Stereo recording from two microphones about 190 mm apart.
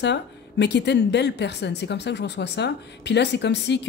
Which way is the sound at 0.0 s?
65° left (ahead or behind).